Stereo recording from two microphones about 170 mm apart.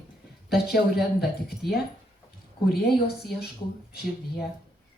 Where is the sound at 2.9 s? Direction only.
65° left (ahead or behind).